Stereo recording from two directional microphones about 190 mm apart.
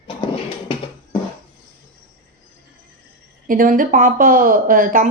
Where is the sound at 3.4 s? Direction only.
45° right (ahead or behind).